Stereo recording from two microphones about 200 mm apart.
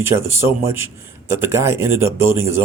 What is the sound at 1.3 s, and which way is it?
Speech, 10° right (ahead or behind).